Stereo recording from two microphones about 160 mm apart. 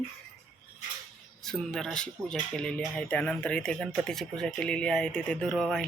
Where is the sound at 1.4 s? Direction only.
5° left (ahead or behind).